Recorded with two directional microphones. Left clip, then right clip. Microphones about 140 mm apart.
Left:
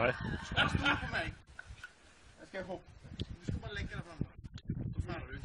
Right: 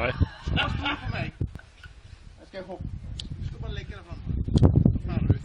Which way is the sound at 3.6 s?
15° left (ahead or behind).